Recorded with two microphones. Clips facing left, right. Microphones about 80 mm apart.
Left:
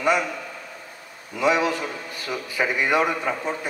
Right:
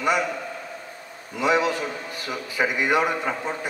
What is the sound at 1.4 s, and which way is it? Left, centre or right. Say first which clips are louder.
A man's voice: even; right.